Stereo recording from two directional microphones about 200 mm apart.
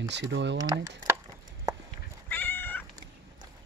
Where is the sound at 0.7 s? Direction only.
15° right (ahead or behind).